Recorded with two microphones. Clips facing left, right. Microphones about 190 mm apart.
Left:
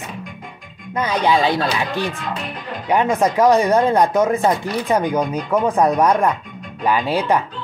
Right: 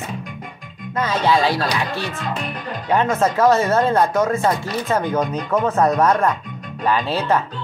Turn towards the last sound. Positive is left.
turn(degrees=15)  # may be behind; listen again after turning